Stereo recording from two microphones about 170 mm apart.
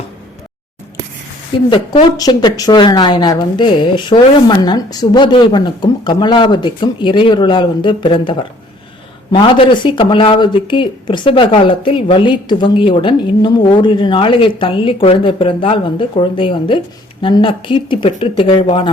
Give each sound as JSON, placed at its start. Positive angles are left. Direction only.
{"t": 1.7, "sound": "speech", "side_deg": 25}